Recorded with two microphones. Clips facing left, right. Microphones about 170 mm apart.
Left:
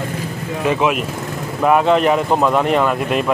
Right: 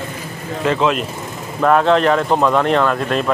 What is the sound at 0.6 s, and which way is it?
Speech, 15° left (ahead or behind).